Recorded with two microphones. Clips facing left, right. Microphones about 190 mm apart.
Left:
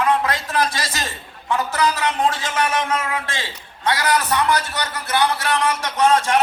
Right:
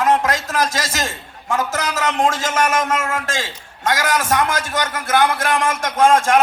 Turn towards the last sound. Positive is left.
turn(degrees=-50)  # may be behind; listen again after turning